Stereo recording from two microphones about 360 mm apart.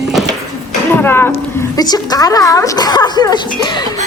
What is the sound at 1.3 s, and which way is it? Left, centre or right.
Speech, centre.